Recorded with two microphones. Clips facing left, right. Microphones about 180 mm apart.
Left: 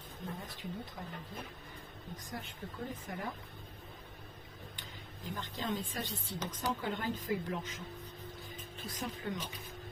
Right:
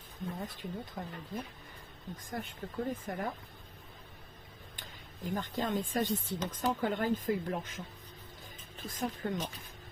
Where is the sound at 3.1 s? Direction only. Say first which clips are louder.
Right 5 dB; 50° right (ahead or behind).